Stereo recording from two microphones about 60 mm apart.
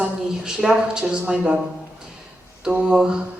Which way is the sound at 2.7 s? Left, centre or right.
Centre.